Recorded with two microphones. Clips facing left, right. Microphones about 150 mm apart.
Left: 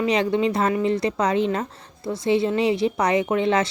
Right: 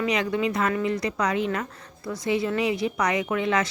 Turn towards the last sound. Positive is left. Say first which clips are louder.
# left 4 dB
turn(degrees=30)  # may be behind; listen again after turning